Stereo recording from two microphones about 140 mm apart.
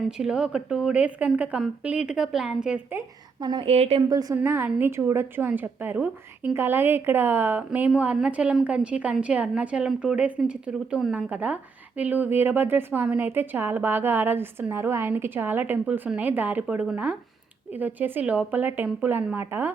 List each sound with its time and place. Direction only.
0.2 s a woman's voice: 5° right (ahead or behind)
3.4 s a woman's voice: 30° right (ahead or behind)
3.7 s a woman's voice: 45° right (ahead or behind)
4.1 s a woman's voice: 25° right (ahead or behind)